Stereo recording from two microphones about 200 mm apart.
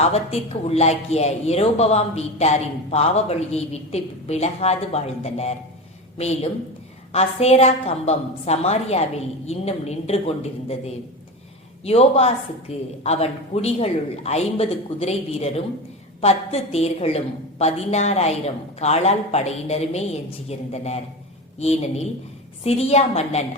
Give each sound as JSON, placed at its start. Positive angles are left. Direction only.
{"t": 0.0, "sound": "speech", "side_deg": 30}